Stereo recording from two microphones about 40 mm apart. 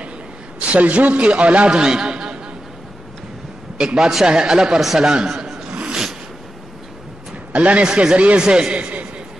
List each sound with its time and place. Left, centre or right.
0.6 s a man's voice: right
1.8 s a man's voice: right
3.7 s a man's voice: centre
5.7 s a sound: right
7.5 s a man's voice: right
7.9 s speech: centre
8.7 s a man's voice: right